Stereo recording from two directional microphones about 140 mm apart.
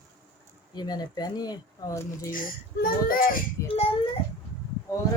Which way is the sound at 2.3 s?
85° left.